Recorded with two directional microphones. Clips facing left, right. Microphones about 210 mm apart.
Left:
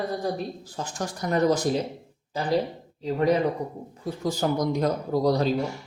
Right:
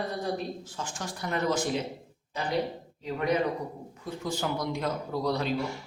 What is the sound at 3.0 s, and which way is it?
Speech, 35° left (ahead or behind).